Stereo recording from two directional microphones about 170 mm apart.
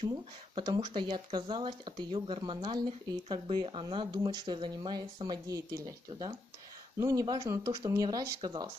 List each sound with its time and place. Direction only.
0.6 s speech: 30° right (ahead or behind)